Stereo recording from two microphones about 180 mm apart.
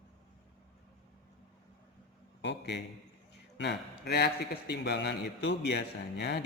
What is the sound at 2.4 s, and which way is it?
A man's voice, 75° left (ahead or behind).